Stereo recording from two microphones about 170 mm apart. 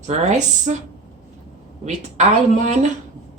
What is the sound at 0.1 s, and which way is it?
Speech, 45° right (ahead or behind).